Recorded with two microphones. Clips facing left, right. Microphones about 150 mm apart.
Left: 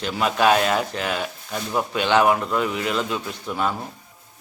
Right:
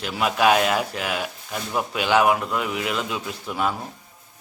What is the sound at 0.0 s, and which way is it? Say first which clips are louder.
A man's voice: left 1 dB; 5° right (ahead or behind).